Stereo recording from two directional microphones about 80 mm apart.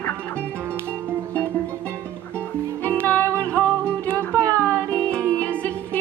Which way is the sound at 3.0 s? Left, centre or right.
Centre.